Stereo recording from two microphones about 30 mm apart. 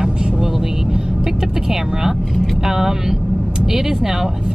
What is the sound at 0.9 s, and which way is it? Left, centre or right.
Speech, right.